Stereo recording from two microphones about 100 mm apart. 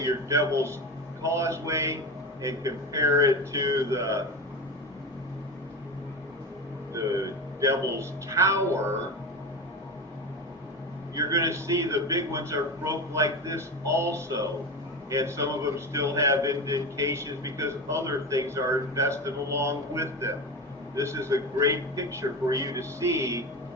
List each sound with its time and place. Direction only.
0.0 s a man's voice: 30° right (ahead or behind)
6.9 s a man's voice: 35° right (ahead or behind)
11.1 s a man's voice: 35° right (ahead or behind)